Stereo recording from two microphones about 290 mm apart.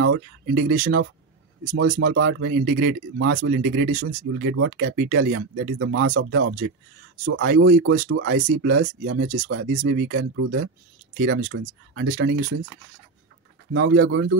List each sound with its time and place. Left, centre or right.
0.0 s speech: right
1.8 s speech: right
13.7 s speech: right